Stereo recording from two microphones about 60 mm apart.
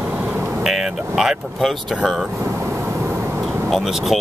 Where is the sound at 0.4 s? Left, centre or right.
Right.